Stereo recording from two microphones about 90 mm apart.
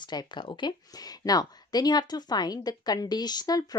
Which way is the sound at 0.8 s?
45° left (ahead or behind).